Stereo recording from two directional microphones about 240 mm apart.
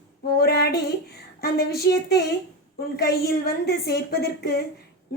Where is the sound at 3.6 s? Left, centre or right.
Left.